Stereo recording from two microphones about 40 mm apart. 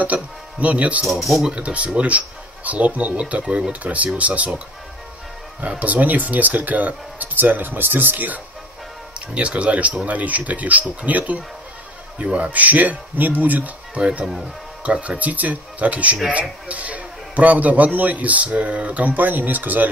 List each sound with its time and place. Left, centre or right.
0.0 s a man's voice: right
5.6 s speech: right
9.3 s a man's voice: right
13.9 s a man's voice: right